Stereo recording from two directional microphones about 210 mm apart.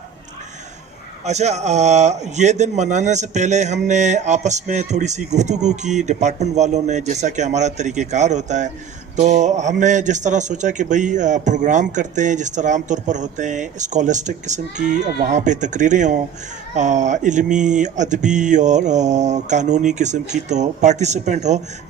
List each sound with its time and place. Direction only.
1.2 s speech: 30° right (ahead or behind)